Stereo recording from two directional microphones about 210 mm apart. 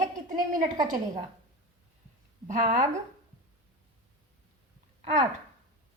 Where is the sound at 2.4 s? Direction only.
35° right (ahead or behind).